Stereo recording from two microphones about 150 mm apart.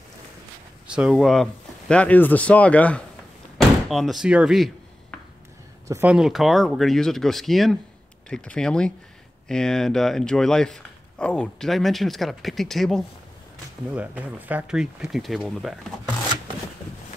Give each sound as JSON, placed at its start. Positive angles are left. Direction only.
{"t": 0.8, "sound": "speech", "side_deg": -5}
{"t": 5.9, "sound": "speech", "side_deg": -20}
{"t": 6.1, "sound": "speech", "side_deg": -5}
{"t": 13.9, "sound": "speech", "side_deg": -10}